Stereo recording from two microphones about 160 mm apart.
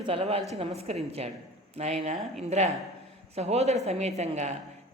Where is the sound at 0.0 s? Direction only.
40° right (ahead or behind).